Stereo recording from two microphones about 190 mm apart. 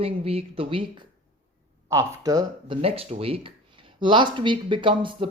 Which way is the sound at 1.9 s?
15° right (ahead or behind).